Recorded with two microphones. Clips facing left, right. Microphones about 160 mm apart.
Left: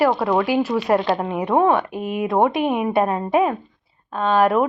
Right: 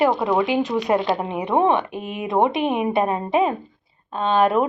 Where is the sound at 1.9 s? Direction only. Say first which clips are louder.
Left 5 dB; 10° left (ahead or behind).